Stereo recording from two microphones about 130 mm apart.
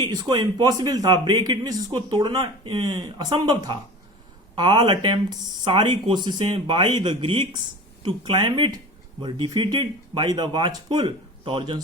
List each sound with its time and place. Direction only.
0.0 s speech: 35° right (ahead or behind)